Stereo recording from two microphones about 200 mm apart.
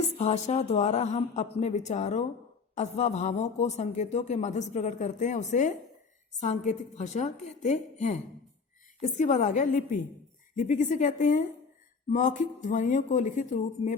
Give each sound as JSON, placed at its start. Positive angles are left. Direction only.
{"t": 0.2, "sound": "speech", "side_deg": 35}